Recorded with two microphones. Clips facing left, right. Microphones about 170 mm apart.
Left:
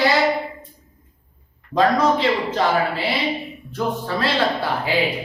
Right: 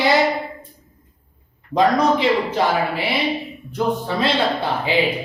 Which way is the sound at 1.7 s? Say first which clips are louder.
Right 1 dB; 15° right (ahead or behind).